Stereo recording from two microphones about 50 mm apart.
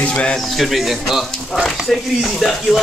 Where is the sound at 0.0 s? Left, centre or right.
Left.